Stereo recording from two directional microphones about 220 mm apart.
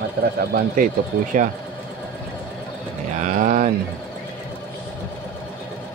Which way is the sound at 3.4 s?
35° right (ahead or behind).